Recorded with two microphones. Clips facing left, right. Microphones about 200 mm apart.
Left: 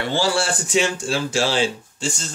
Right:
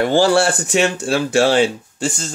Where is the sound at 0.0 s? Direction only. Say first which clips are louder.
Right 8 dB; 50° right (ahead or behind).